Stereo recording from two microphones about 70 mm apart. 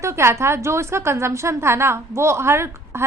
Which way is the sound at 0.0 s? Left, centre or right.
Right.